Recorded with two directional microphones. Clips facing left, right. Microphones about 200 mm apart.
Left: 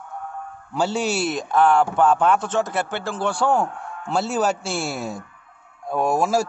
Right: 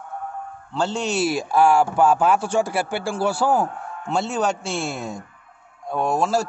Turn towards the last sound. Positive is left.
turn(degrees=10)  # may be behind; listen again after turning